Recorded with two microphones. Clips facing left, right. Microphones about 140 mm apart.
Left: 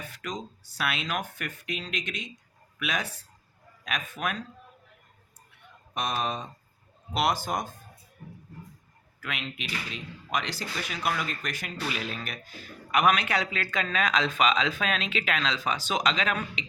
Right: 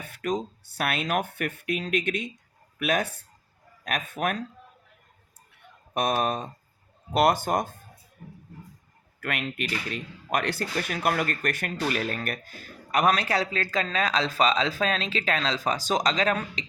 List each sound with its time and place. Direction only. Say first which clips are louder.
0.0 s speech: right 7 dB; 55° right (ahead or behind)
5.9 s speech: right 5 dB; 55° right (ahead or behind)
9.2 s speech: right 6 dB; 55° right (ahead or behind); by 16.6 s 35° right (ahead or behind)